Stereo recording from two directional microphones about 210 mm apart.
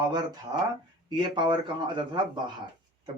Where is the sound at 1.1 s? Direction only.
20° right (ahead or behind).